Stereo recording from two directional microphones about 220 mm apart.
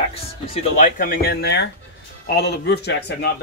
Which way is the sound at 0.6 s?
40° left (ahead or behind).